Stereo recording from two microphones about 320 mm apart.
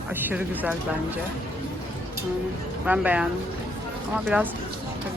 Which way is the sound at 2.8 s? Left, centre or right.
Centre.